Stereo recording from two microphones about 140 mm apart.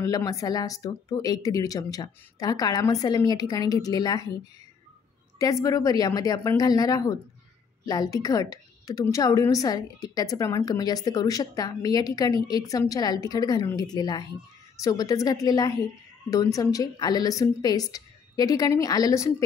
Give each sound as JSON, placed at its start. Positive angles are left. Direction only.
{"t": 0.0, "sound": "speech", "side_deg": 25}
{"t": 5.4, "sound": "speech", "side_deg": 25}